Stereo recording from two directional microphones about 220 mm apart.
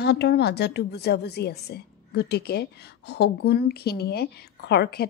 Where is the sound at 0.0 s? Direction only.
50° left (ahead or behind).